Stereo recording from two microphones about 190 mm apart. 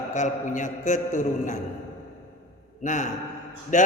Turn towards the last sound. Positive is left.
turn(degrees=40)  # may be behind; listen again after turning